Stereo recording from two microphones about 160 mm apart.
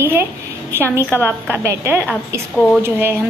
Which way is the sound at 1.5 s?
15° right (ahead or behind).